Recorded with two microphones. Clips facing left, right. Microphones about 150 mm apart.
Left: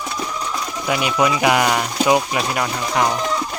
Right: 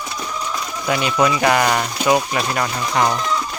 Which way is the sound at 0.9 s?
10° left (ahead or behind).